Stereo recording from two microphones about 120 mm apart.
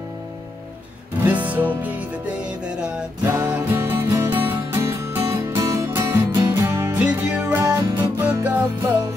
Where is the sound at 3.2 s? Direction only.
15° right (ahead or behind).